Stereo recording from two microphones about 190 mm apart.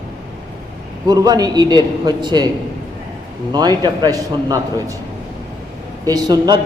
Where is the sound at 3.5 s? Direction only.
20° right (ahead or behind).